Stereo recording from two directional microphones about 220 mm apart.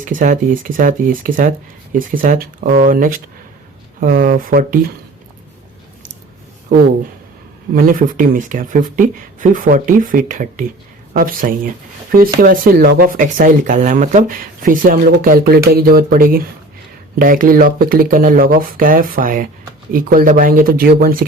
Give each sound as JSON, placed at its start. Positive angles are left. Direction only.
{"t": 0.0, "sound": "speech", "side_deg": -35}
{"t": 7.7, "sound": "speech", "side_deg": -40}